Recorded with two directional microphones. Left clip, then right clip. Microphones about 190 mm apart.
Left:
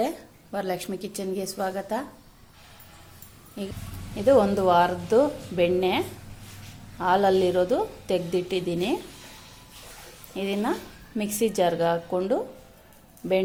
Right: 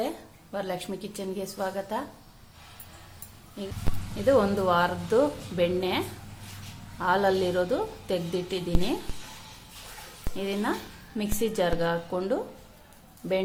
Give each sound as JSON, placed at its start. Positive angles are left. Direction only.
{"t": 0.5, "sound": "a woman's voice", "side_deg": 20}
{"t": 4.1, "sound": "a woman's voice", "side_deg": 10}
{"t": 7.0, "sound": "a woman's voice", "side_deg": 15}
{"t": 10.3, "sound": "a woman's voice", "side_deg": 15}